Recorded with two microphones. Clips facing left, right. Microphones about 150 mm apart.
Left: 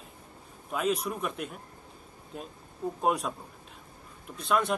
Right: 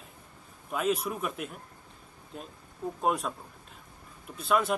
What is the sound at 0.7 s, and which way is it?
A man's voice, centre (ahead or behind).